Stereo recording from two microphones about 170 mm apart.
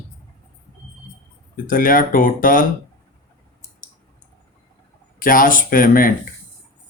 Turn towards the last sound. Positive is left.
turn(degrees=55)  # may be behind; listen again after turning